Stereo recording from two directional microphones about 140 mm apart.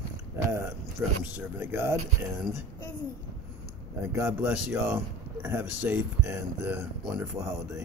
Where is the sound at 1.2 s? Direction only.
15° right (ahead or behind).